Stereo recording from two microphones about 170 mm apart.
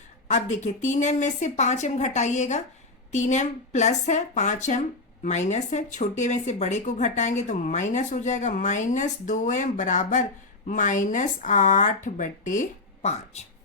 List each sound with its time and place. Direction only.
0.3 s speech: 45° left (ahead or behind)